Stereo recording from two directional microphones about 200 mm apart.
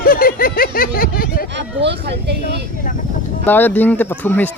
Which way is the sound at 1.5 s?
60° right (ahead or behind).